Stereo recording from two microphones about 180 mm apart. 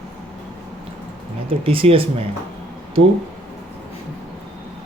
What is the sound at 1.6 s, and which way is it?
Speech, 30° right (ahead or behind).